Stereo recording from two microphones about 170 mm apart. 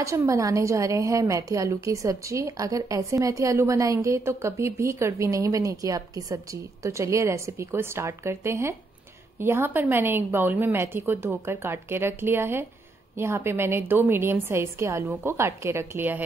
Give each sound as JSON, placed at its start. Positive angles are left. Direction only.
{"t": 0.0, "sound": "a woman's voice", "side_deg": -20}